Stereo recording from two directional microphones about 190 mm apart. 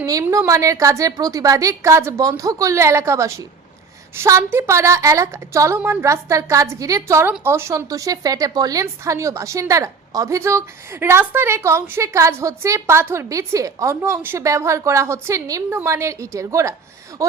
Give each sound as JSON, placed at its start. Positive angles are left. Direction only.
{"t": 0.0, "sound": "a woman's voice", "side_deg": -15}